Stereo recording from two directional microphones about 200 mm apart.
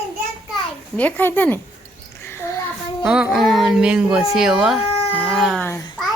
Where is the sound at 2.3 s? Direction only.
15° left (ahead or behind).